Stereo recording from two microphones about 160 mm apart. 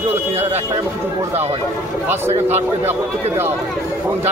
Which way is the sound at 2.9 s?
15° right (ahead or behind).